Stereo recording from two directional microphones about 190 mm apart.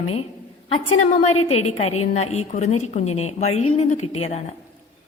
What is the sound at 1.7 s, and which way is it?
A woman's voice, 35° left (ahead or behind).